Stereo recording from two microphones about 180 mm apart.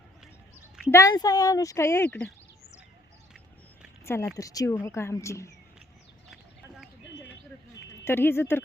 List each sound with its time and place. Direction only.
0.9 s speech: 15° left (ahead or behind)
4.0 s speech: 15° left (ahead or behind)
6.3 s a sound: centre (ahead or behind)
8.0 s speech: 10° left (ahead or behind)